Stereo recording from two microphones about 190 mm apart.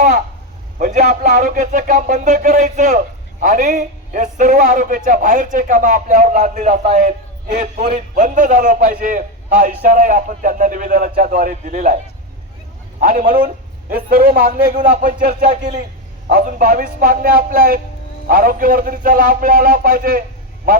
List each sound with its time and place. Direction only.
0.8 s a man's voice: 40° right (ahead or behind)
7.9 s a man's voice: 45° right (ahead or behind)
13.0 s a man's voice: 40° right (ahead or behind)